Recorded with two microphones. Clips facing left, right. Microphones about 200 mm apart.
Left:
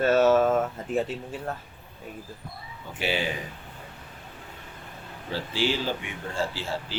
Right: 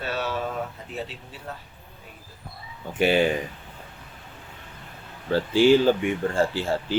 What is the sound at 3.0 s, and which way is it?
Speech, 50° right (ahead or behind).